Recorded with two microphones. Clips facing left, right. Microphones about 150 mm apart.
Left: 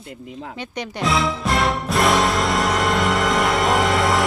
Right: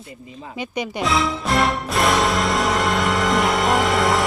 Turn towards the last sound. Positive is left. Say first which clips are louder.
# even
turn(degrees=0)  # may be behind; listen again after turning